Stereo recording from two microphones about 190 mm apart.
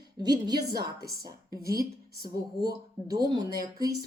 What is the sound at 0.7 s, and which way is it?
Speech, 55° right (ahead or behind).